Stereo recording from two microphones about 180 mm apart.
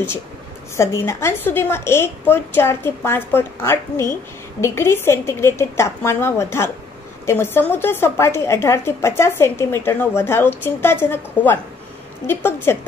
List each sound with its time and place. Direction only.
0.7 s a woman's voice: 15° left (ahead or behind)